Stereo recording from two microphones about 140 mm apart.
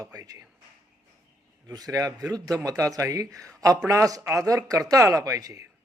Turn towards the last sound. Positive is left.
turn(degrees=-20)  # may be behind; listen again after turning